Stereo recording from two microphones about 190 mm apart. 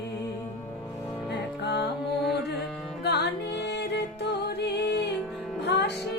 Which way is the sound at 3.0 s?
60° left (ahead or behind).